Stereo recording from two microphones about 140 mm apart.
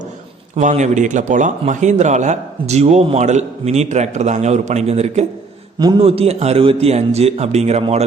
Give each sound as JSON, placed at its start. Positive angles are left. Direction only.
{"t": 0.5, "sound": "a man's voice", "side_deg": -55}
{"t": 5.8, "sound": "a man's voice", "side_deg": -35}